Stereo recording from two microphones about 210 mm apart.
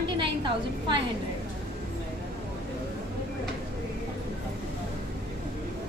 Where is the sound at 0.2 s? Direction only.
25° right (ahead or behind).